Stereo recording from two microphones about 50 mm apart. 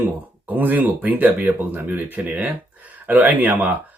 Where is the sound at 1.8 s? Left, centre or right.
Right.